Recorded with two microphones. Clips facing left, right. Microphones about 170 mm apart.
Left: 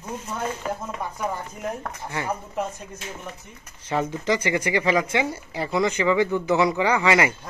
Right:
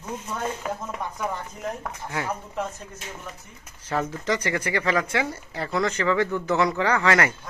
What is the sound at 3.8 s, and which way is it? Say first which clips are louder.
Speech: left 2 dB; centre (ahead or behind).